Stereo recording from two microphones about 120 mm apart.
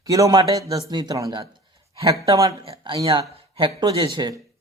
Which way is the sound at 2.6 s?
40° right (ahead or behind).